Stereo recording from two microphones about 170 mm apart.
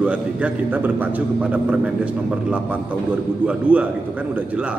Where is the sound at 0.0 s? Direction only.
5° right (ahead or behind).